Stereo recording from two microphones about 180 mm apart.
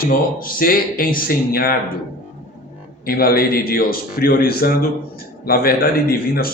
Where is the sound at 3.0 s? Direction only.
55° left (ahead or behind).